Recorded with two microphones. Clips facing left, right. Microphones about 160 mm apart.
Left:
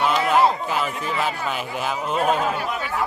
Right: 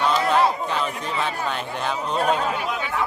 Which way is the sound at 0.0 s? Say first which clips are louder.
Even; 10° left (ahead or behind).